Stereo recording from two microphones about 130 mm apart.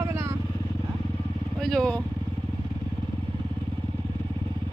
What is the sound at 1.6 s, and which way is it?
Speech, 5° left (ahead or behind).